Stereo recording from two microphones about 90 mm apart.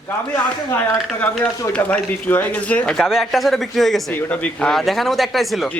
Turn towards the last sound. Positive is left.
turn(degrees=0)  # may be behind; listen again after turning